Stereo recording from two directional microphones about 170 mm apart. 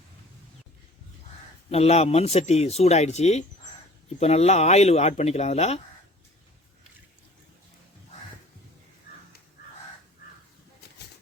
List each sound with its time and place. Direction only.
1.7 s speech: 35° left (ahead or behind)